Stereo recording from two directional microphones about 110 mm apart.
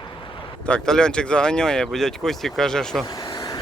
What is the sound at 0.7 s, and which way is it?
Speech, 5° left (ahead or behind).